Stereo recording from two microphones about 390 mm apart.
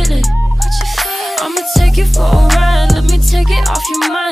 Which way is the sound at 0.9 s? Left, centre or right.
Centre.